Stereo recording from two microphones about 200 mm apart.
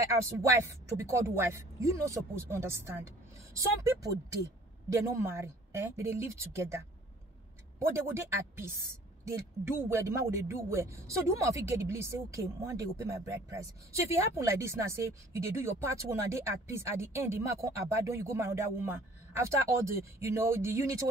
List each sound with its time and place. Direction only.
0.1 s speech: 15° right (ahead or behind)
7.9 s speech: 15° right (ahead or behind)